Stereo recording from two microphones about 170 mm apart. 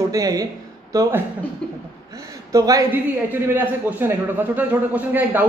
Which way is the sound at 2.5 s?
20° right (ahead or behind).